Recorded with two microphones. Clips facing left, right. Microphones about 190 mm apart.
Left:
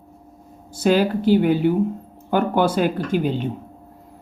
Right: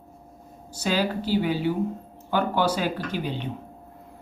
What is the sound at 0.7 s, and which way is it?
Speech, 50° left (ahead or behind).